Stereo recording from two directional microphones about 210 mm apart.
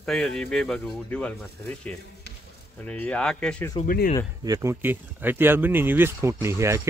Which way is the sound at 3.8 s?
45° left (ahead or behind).